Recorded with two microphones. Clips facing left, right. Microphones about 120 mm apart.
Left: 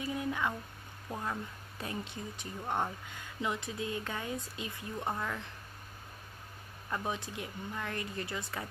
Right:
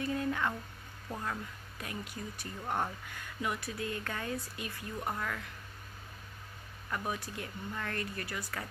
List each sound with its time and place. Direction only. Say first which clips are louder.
0.0 s speech: right 1 dB; 15° left (ahead or behind)
1.8 s speech: left 2 dB; 25° left (ahead or behind)
6.9 s speech: left 1 dB; 20° left (ahead or behind)